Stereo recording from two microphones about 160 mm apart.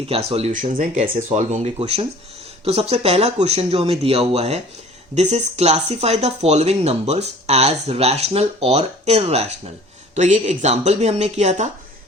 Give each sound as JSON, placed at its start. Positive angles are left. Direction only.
{"t": 0.1, "sound": "speech", "side_deg": -40}
{"t": 0.5, "sound": "speech", "side_deg": -55}
{"t": 1.1, "sound": "speech", "side_deg": -40}